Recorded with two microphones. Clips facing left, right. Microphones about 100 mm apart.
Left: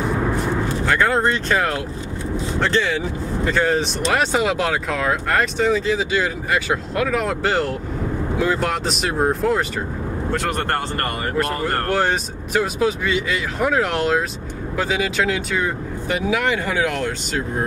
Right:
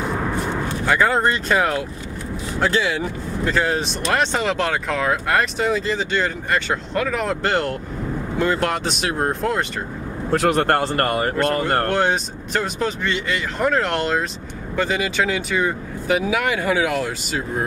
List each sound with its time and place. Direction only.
0.4 s speech: centre (ahead or behind)
10.3 s speech: 45° right (ahead or behind)
11.3 s speech: 5° left (ahead or behind)